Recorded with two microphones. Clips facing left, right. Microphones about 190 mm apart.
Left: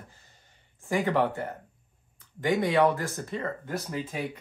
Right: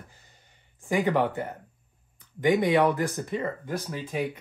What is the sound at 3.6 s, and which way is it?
Speech, centre (ahead or behind).